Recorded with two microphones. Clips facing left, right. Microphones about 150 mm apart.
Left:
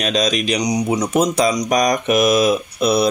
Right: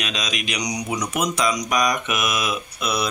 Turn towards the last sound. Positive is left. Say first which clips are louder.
# left 9 dB
turn(degrees=35)  # may be behind; listen again after turning